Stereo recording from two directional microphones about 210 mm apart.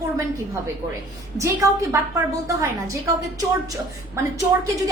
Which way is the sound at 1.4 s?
15° right (ahead or behind).